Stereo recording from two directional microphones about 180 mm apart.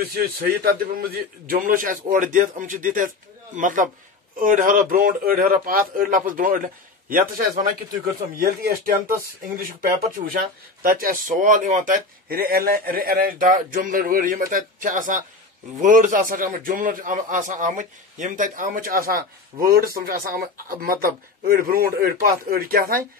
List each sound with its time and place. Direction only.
0.0 s a man's voice: 55° right (ahead or behind)